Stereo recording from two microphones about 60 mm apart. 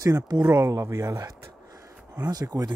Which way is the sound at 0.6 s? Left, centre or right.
Right.